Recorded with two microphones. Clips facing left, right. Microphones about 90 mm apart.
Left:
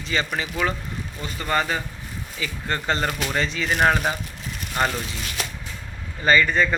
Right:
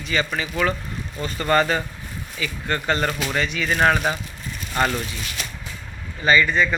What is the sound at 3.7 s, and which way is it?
Speech, 15° left (ahead or behind).